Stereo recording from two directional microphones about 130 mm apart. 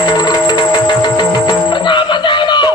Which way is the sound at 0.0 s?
35° left (ahead or behind).